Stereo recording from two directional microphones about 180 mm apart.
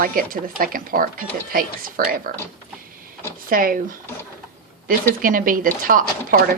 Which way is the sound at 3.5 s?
50° right (ahead or behind).